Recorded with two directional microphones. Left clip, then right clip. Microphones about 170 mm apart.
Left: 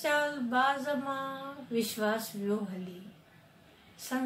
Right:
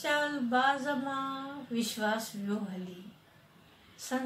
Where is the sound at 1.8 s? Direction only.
10° left (ahead or behind).